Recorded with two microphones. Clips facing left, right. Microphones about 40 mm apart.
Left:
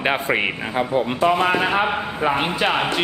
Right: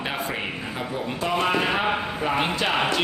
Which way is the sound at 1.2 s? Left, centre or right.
Left.